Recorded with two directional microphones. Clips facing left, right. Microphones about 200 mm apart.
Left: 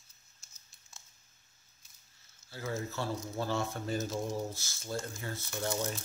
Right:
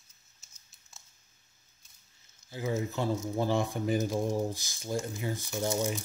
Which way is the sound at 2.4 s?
15° right (ahead or behind).